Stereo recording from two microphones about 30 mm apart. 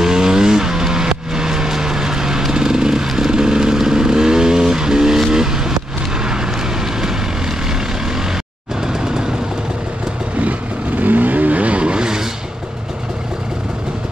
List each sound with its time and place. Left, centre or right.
0.0 s vehicle: centre
2.5 s a sound: right
3.3 s vehicle: right
8.8 s vehicle: right
11.0 s vehicle: right